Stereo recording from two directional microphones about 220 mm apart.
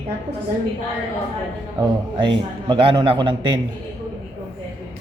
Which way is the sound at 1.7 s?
20° right (ahead or behind).